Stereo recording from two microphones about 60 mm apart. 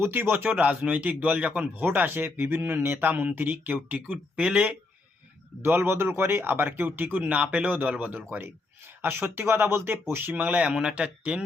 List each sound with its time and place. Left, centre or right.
0.0 s speech: right
1.8 s speech: right
3.9 s speech: centre
5.6 s speech: right
10.3 s speech: right